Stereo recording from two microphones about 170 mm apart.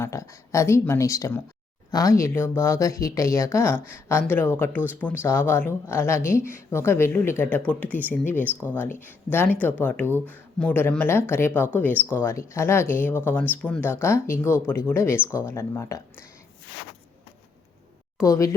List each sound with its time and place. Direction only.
0.0 s speech: 15° left (ahead or behind)
18.2 s speech: 20° left (ahead or behind)